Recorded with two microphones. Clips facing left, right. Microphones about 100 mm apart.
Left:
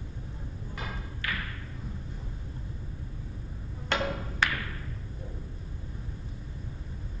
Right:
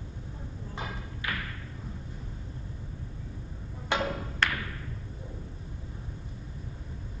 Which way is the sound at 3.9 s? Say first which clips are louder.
Right 1 dB; 15° right (ahead or behind).